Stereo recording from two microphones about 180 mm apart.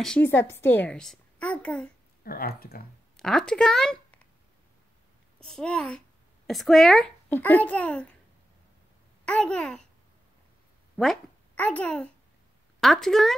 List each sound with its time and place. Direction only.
0.0 s a child's voice: 5° left (ahead or behind)
2.2 s speech: 55° left (ahead or behind)
3.2 s speech: 5° left (ahead or behind)
5.4 s a child's voice: 5° left (ahead or behind)
9.2 s a child's voice: 5° left (ahead or behind)
11.0 s a child's voice: 5° left (ahead or behind)